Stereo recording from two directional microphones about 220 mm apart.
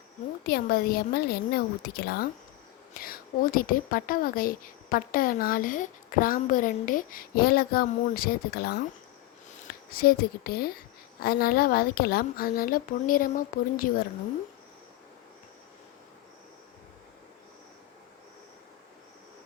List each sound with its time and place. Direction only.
0.4 s a woman's voice: 45° left (ahead or behind)
9.9 s a woman's voice: 45° left (ahead or behind)